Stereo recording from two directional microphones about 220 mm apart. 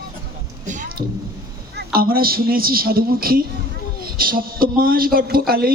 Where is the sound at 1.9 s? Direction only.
40° right (ahead or behind).